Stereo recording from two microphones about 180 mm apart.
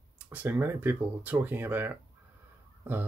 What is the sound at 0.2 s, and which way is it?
Speech, 10° right (ahead or behind).